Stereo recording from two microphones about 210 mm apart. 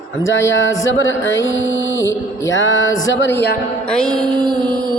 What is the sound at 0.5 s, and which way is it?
Music, 65° left (ahead or behind).